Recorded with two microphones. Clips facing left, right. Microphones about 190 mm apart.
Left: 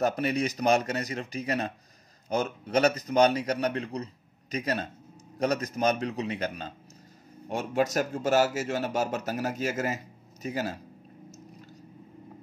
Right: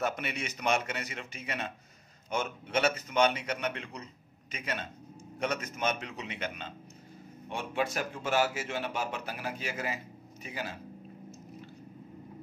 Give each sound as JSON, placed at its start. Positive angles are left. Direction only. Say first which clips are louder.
{"t": 0.0, "sound": "speech", "louder": "left 8 dB", "side_deg": 40}